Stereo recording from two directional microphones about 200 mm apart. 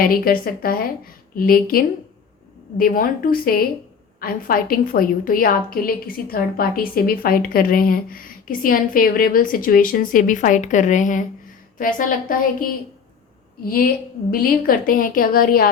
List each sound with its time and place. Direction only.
0.0 s a woman's voice: 45° left (ahead or behind)
14.3 s a woman's voice: 45° left (ahead or behind)